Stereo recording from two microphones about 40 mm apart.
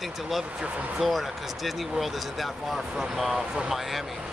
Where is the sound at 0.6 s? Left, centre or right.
Right.